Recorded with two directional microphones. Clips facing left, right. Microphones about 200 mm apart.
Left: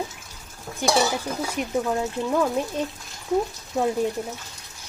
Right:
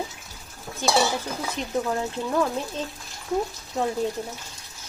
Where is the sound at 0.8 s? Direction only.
15° left (ahead or behind).